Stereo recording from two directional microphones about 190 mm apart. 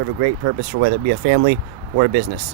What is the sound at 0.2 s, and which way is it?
Speech, 45° right (ahead or behind).